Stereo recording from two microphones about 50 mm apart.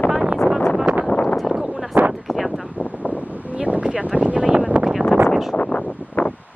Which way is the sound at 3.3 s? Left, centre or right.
Right.